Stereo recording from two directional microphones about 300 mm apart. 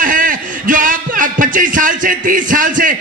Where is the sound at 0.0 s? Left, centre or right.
Right.